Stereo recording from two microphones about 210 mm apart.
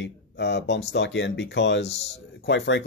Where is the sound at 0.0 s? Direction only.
55° left (ahead or behind).